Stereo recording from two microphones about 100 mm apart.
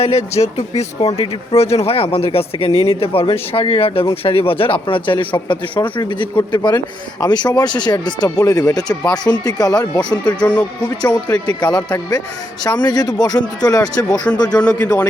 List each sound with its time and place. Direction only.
0.0 s speech: 90° left; by 14.2 s 40° left (ahead or behind)
14.5 s a man's voice: 15° left (ahead or behind)